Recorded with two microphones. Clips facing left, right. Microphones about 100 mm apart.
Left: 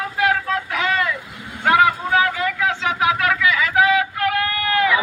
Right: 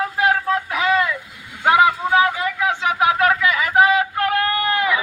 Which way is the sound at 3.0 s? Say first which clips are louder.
Right 3 dB; 30° right (ahead or behind).